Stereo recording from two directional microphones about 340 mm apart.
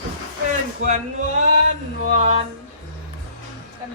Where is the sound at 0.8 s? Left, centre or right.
Right.